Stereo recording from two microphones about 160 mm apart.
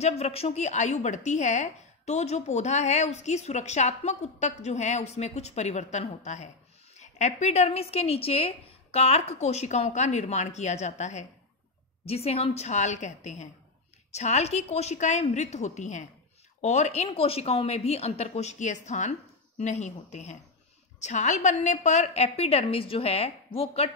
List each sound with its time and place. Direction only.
0.0 s a woman's voice: 40° left (ahead or behind)